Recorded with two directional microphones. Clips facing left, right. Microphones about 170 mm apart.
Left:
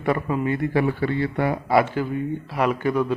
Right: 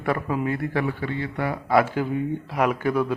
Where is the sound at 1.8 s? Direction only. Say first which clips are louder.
Even; 10° right (ahead or behind).